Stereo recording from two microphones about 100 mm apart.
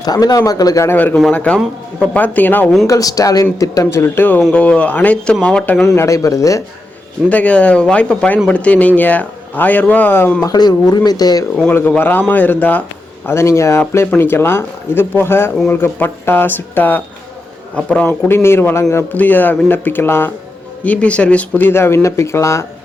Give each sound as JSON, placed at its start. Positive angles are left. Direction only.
{"t": 0.0, "sound": "speech", "side_deg": 40}
{"t": 0.9, "sound": "a man's voice", "side_deg": 15}
{"t": 2.8, "sound": "a man's voice", "side_deg": 35}
{"t": 5.9, "sound": "speech", "side_deg": 30}
{"t": 7.3, "sound": "a man's voice", "side_deg": 15}
{"t": 10.4, "sound": "speech", "side_deg": 40}
{"t": 11.7, "sound": "a man's voice", "side_deg": 20}